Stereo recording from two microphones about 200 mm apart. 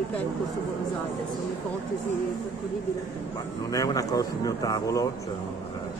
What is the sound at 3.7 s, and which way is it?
Speech, 15° left (ahead or behind).